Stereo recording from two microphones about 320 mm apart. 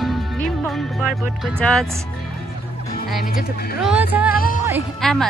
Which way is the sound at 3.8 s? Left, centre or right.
Centre.